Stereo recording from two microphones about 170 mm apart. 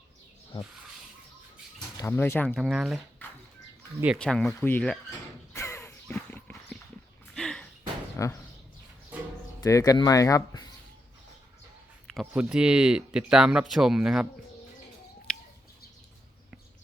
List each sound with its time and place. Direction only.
2.0 s speech: 15° left (ahead or behind)
2.6 s speech: centre (ahead or behind)
3.2 s a sound: 10° left (ahead or behind)
4.2 s speech: 5° left (ahead or behind)
5.5 s a sound: 15° left (ahead or behind)
7.3 s slam: 5° left (ahead or behind)
8.1 s a sound: 15° left (ahead or behind)
9.6 s speech: 20° left (ahead or behind)
12.1 s speech: 5° right (ahead or behind)